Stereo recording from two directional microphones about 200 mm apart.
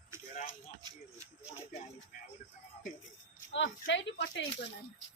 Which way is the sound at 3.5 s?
65° left (ahead or behind).